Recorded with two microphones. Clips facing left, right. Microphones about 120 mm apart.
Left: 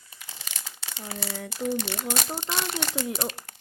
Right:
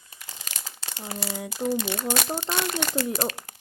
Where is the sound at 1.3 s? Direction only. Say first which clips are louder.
Right 2 dB; 5° right (ahead or behind).